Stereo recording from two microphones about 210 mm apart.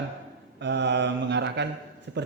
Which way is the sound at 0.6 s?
55° right (ahead or behind).